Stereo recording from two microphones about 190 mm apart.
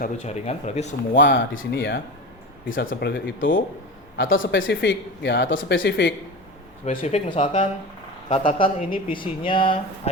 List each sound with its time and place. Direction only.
0.0 s speech: 35° left (ahead or behind)
1.2 s speech: 70° left (ahead or behind)
2.6 s speech: 90° left; by 3.6 s 55° left (ahead or behind)
4.2 s speech: 85° left; by 6.1 s 70° left (ahead or behind)
6.8 s speech: 35° left (ahead or behind)
8.3 s speech: 25° left (ahead or behind)